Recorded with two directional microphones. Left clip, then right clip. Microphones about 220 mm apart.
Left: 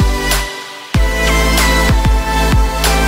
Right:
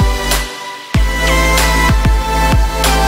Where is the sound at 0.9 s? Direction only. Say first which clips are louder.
Left 2 dB; centre (ahead or behind).